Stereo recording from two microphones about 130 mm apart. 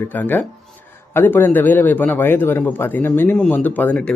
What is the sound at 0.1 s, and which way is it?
A man's voice, 15° left (ahead or behind).